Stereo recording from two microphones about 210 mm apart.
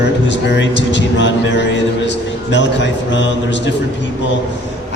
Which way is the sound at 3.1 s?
60° left (ahead or behind).